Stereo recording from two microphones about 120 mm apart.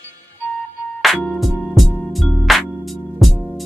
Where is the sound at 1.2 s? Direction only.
Centre (ahead or behind).